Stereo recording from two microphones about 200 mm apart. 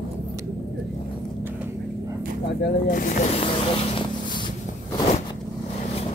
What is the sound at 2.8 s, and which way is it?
Vehicle, 40° left (ahead or behind).